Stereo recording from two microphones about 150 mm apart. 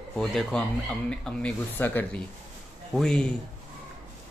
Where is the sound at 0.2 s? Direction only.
Centre (ahead or behind).